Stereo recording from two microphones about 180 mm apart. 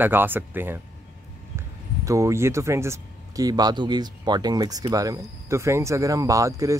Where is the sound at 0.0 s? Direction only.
10° right (ahead or behind).